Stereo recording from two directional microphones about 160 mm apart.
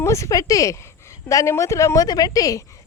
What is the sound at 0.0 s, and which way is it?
A woman's voice, 20° left (ahead or behind).